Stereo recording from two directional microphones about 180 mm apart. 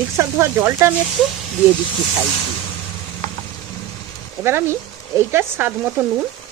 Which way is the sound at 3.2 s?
40° right (ahead or behind).